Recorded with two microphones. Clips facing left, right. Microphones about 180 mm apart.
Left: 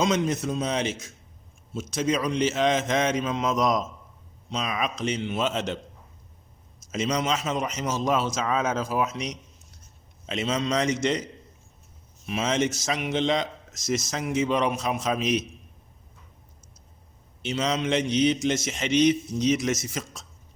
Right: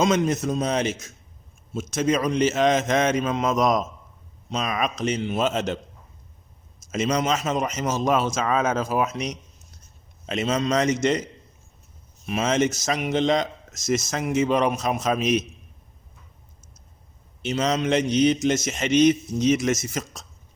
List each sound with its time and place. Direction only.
0.0 s a man's voice: 45° right (ahead or behind)
6.9 s a man's voice: 50° right (ahead or behind)
17.4 s a man's voice: 45° right (ahead or behind)